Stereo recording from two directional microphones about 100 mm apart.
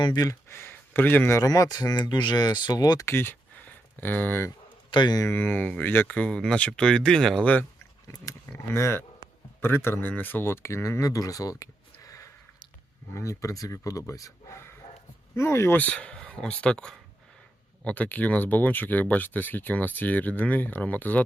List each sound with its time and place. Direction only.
0.0 s speech: 40° left (ahead or behind)
0.4 s a sound: 25° left (ahead or behind)
1.4 s speech: 35° left (ahead or behind)
3.1 s a sound: 20° left (ahead or behind)
4.0 s speech: 20° left (ahead or behind)
4.9 s a man's voice: 50° left (ahead or behind)
5.1 s speech: 25° left (ahead or behind)
8.1 s speech: 35° left (ahead or behind)
15.8 s speech: 15° left (ahead or behind)